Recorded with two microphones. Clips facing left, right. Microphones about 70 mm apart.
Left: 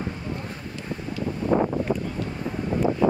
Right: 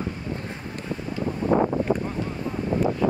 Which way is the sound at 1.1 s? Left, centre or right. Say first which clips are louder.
Right 1 dB; right.